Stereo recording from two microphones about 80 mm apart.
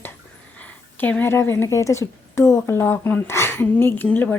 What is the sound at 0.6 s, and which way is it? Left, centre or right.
A woman's voice, centre.